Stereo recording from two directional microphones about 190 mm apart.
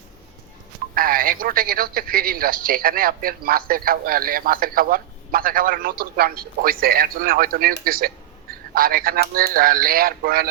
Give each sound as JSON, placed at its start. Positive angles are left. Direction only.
{"t": 0.9, "sound": "a man's voice", "side_deg": -50}
{"t": 7.9, "sound": "telephone", "side_deg": -50}
{"t": 9.3, "sound": "a man's voice", "side_deg": -50}